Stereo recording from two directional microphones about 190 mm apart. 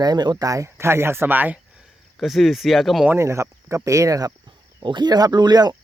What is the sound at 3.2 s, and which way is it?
Speech, 15° right (ahead or behind).